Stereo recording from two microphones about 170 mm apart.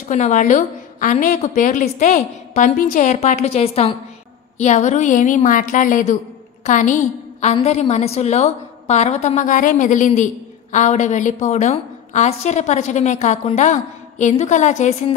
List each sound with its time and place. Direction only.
0.1 s a woman's voice: 45° left (ahead or behind)